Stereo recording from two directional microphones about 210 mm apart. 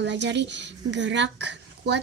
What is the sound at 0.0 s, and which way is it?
Speech, 55° right (ahead or behind).